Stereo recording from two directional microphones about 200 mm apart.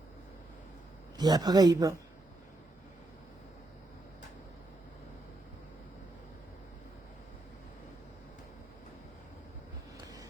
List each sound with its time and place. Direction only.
1.1 s a man's voice: 20° right (ahead or behind)
10.0 s vehicle: 20° right (ahead or behind)